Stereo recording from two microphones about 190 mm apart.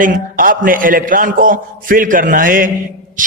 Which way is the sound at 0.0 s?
45° right (ahead or behind).